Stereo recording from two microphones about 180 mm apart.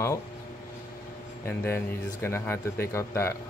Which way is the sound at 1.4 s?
15° left (ahead or behind).